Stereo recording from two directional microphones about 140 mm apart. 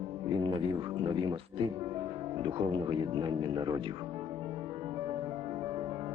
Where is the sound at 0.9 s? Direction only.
35° right (ahead or behind).